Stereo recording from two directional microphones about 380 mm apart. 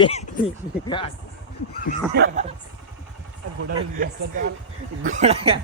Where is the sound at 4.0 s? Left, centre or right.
Right.